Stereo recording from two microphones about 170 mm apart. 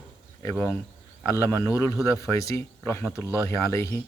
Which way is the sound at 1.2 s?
15° left (ahead or behind).